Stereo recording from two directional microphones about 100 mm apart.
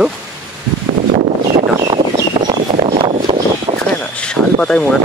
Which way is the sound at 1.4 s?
70° right (ahead or behind).